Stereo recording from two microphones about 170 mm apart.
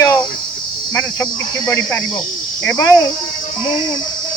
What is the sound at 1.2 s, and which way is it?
Speech, 20° left (ahead or behind).